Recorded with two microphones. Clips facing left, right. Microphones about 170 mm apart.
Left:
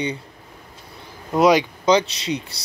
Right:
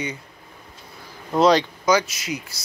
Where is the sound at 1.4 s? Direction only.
15° left (ahead or behind).